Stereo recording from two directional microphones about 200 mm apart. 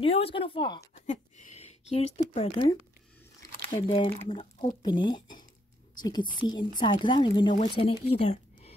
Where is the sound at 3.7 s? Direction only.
25° left (ahead or behind).